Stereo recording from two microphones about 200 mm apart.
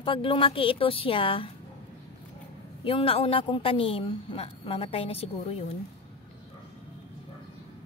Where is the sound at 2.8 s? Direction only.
30° left (ahead or behind).